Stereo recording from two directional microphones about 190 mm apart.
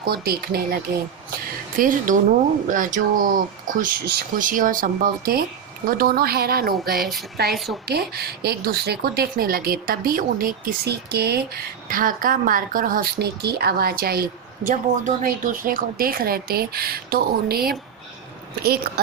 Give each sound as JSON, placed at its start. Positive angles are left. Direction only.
{"t": 0.0, "sound": "speech", "side_deg": -50}
{"t": 7.5, "sound": "speech", "side_deg": 0}
{"t": 7.9, "sound": "speech", "side_deg": -55}
{"t": 11.9, "sound": "a woman's voice", "side_deg": -45}